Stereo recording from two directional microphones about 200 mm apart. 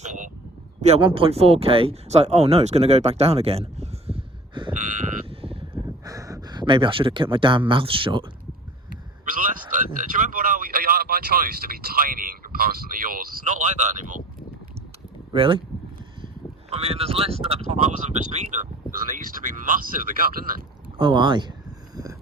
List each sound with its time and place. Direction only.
0.0 s a sound: 35° right (ahead or behind)
0.8 s speech: 30° right (ahead or behind)
4.7 s sheep: 40° right (ahead or behind)
6.1 s speech: 15° right (ahead or behind)
9.2 s a man's voice: 40° right (ahead or behind)
15.3 s speech: 25° right (ahead or behind); by 20.6 s 45° right (ahead or behind)
21.0 s speech: 25° right (ahead or behind)